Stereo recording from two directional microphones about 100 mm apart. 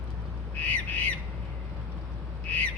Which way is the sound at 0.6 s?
15° left (ahead or behind).